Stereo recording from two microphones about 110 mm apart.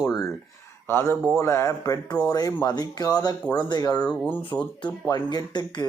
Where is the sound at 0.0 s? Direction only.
30° left (ahead or behind).